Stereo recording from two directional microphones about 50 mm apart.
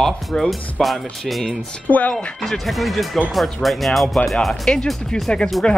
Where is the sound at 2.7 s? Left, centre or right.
Centre.